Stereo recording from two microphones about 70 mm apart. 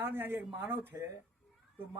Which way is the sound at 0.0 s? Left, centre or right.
Right.